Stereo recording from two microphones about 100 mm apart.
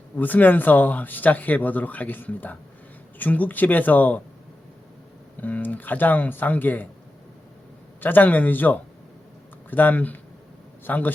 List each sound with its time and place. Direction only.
0.2 s speech: 15° left (ahead or behind)
5.4 s speech: 15° left (ahead or behind)
8.0 s speech: 20° left (ahead or behind)